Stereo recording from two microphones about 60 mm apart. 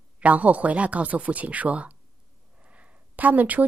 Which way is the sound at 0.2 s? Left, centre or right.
Right.